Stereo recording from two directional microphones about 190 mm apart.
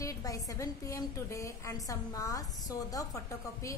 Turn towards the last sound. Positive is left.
turn(degrees=15)  # may be behind; listen again after turning